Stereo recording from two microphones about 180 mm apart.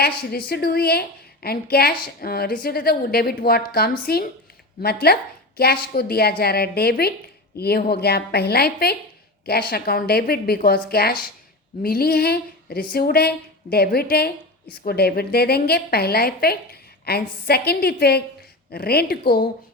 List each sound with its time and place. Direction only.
0.0 s a woman's voice: 60° left (ahead or behind)